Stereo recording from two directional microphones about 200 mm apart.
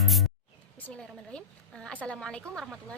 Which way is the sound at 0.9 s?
5° left (ahead or behind).